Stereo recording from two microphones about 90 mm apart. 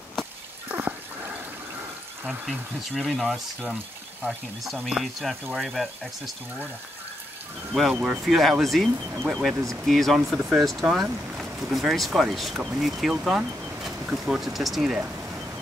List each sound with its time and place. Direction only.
0.7 s dog: 15° right (ahead or behind)
2.9 s speech: centre (ahead or behind)
7.7 s speech: 5° right (ahead or behind)
10.3 s speech: 10° right (ahead or behind)